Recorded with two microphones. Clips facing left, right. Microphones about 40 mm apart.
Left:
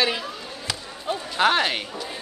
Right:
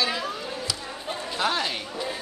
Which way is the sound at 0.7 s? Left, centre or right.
Left.